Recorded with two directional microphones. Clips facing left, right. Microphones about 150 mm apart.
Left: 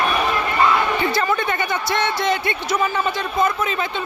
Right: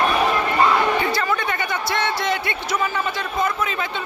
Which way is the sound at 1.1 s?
25° left (ahead or behind).